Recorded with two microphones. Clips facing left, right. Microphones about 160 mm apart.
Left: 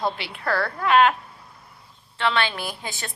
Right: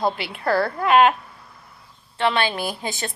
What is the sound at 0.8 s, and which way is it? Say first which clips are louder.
Speech: right 2 dB; 45° right (ahead or behind).